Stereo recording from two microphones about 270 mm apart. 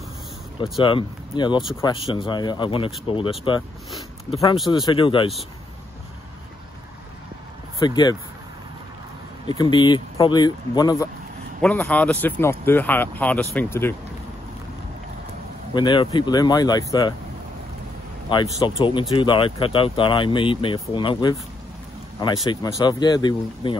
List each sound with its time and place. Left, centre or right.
0.7 s speech: centre
7.8 s speech: centre
9.5 s speech: centre
15.7 s speech: centre
18.3 s speech: centre